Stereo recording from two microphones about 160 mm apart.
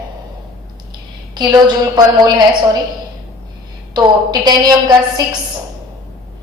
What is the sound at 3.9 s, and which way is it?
Speech, 25° right (ahead or behind).